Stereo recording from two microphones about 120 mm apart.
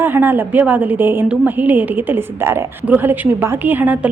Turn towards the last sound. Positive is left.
turn(degrees=-15)  # may be behind; listen again after turning